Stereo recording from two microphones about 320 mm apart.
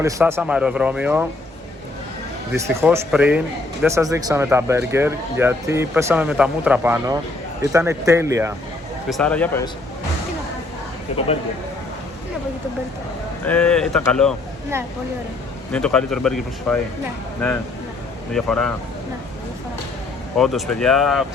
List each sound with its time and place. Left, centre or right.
0.0 s speech: centre
2.5 s speech: centre
9.0 s speech: centre
11.1 s speech: centre
13.4 s speech: centre
15.7 s speech: centre
18.3 s speech: centre
20.3 s speech: centre